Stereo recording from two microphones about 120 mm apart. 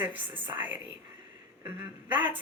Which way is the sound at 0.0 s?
15° right (ahead or behind).